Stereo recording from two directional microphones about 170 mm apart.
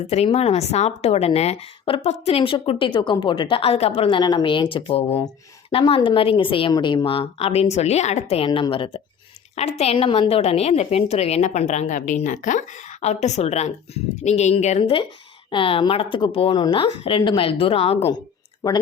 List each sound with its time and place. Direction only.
0.1 s a woman's voice: 40° left (ahead or behind)
8.4 s a woman's voice: 30° left (ahead or behind)